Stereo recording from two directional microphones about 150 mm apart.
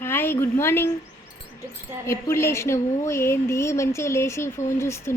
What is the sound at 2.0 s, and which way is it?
A woman's voice, 20° left (ahead or behind).